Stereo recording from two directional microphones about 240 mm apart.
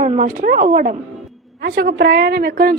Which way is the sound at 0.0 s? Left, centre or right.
Right.